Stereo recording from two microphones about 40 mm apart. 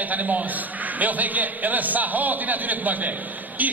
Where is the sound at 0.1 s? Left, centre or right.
Right.